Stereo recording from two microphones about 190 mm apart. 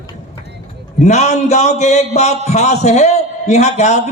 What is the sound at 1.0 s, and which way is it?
A man's voice, 35° left (ahead or behind).